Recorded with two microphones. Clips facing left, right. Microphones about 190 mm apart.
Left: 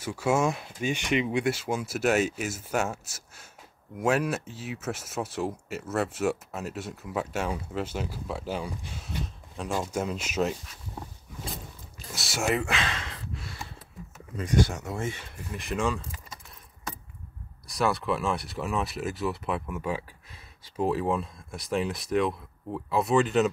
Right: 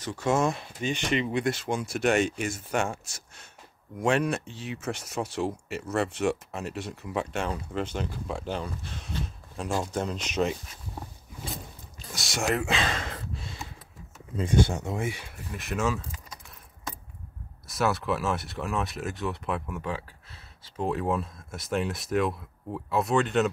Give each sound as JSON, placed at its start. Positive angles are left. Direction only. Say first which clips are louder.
{"t": 0.0, "sound": "speech", "louder": "even", "side_deg": 10}
{"t": 12.1, "sound": "speech", "louder": "even", "side_deg": 5}
{"t": 12.6, "sound": "speech", "louder": "right 3 dB", "side_deg": -35}
{"t": 14.3, "sound": "speech", "louder": "right 1 dB", "side_deg": -25}
{"t": 15.0, "sound": "speech", "louder": "right 1 dB", "side_deg": -10}
{"t": 17.6, "sound": "speech", "louder": "even", "side_deg": 0}